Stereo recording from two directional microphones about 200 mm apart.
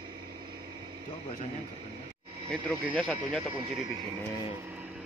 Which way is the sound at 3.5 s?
25° right (ahead or behind).